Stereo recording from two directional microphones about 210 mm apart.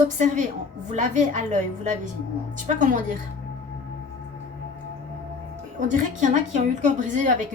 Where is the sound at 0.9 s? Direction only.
35° right (ahead or behind).